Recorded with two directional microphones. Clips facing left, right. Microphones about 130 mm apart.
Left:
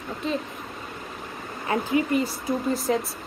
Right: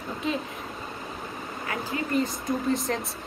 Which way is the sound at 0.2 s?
Centre (ahead or behind).